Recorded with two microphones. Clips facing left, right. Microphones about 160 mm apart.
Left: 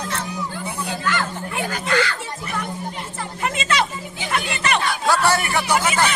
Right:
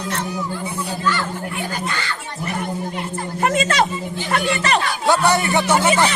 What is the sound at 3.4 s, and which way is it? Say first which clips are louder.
Speech: right 4 dB; 50° right (ahead or behind).